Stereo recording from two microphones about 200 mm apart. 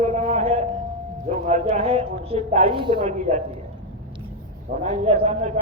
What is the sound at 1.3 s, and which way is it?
Speech, 35° right (ahead or behind).